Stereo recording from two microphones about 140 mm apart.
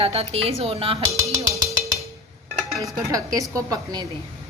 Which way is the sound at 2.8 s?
25° right (ahead or behind).